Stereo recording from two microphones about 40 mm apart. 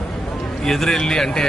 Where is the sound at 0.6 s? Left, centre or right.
Centre.